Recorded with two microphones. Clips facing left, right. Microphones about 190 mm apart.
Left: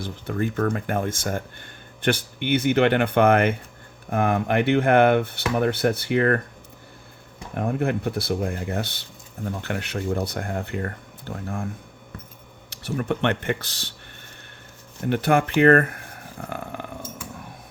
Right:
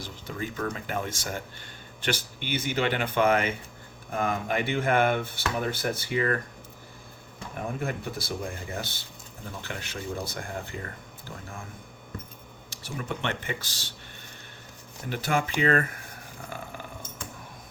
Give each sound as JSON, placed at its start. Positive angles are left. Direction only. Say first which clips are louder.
{"t": 0.0, "sound": "speech", "louder": "left 8 dB", "side_deg": 55}
{"t": 7.5, "sound": "speech", "louder": "left 8 dB", "side_deg": 60}
{"t": 12.7, "sound": "speech", "louder": "left 9 dB", "side_deg": 65}
{"t": 15.1, "sound": "speech", "louder": "left 8 dB", "side_deg": 60}
{"t": 16.4, "sound": "dog", "louder": "left 7 dB", "side_deg": 60}